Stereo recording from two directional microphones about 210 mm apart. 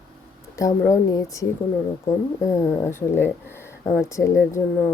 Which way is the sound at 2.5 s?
15° left (ahead or behind).